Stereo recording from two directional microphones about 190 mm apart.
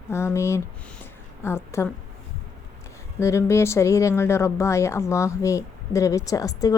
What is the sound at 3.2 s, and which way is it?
Speech, 15° left (ahead or behind).